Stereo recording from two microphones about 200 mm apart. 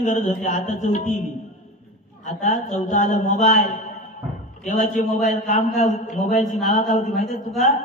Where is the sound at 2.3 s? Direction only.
35° left (ahead or behind).